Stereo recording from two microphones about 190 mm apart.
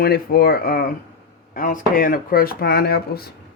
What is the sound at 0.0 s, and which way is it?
Speech, 50° left (ahead or behind).